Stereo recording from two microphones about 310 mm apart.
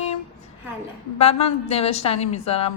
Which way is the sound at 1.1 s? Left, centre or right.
Centre.